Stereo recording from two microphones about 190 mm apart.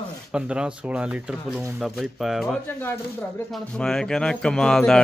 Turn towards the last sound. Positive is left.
turn(degrees=5)  # may be behind; listen again after turning